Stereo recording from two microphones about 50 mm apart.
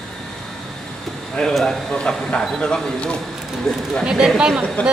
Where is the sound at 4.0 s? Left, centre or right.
Centre.